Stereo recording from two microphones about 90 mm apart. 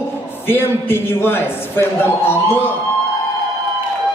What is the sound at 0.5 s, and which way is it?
A man's voice, 25° left (ahead or behind).